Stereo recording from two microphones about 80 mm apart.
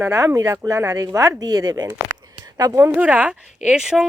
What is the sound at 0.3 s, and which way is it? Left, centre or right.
Speech, right.